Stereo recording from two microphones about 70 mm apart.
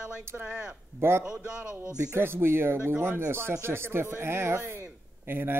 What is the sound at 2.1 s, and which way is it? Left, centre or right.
Speech, right.